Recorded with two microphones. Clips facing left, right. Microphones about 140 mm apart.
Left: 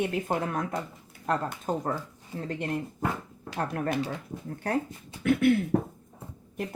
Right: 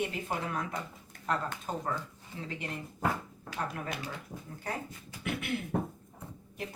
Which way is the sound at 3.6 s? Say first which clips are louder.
Left 7 dB; 55° left (ahead or behind).